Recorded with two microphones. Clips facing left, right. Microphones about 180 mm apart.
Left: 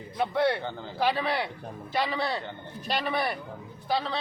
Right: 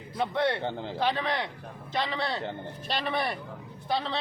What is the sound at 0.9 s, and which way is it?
A man's voice, 10° left (ahead or behind).